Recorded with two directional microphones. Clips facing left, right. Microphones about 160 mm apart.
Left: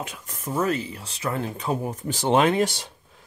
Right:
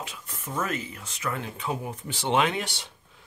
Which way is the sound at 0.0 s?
45° left (ahead or behind).